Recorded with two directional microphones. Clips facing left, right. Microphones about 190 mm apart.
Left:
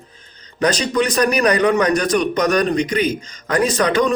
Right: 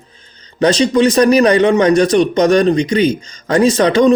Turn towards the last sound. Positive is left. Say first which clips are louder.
# right 6 dB
turn(degrees=-25)  # may be behind; listen again after turning